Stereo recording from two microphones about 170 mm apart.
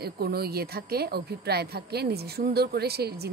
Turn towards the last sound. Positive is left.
turn(degrees=-70)  # may be behind; listen again after turning